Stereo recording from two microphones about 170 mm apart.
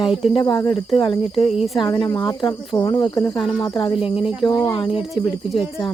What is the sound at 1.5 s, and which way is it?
Speech, centre (ahead or behind).